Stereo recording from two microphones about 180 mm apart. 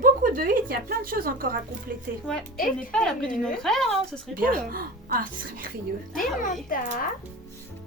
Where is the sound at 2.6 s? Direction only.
50° left (ahead or behind).